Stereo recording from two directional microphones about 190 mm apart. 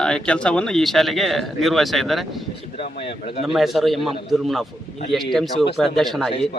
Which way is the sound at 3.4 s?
Centre (ahead or behind).